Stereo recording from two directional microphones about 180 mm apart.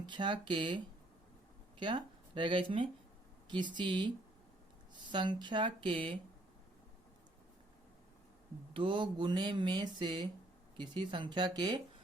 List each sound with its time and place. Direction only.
0.0 s speech: 25° right (ahead or behind)
1.8 s speech: 25° right (ahead or behind)
5.1 s speech: 25° right (ahead or behind)
8.7 s speech: 30° right (ahead or behind)